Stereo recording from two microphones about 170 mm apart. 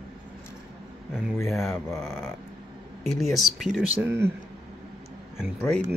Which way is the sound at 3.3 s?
Centre (ahead or behind).